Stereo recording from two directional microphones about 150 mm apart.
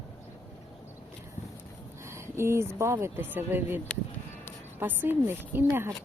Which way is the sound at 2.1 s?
15° right (ahead or behind).